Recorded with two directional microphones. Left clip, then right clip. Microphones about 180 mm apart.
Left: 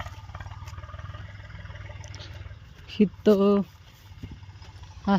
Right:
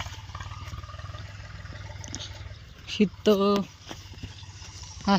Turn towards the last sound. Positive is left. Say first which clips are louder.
# right 1 dB
turn(degrees=15)  # may be behind; listen again after turning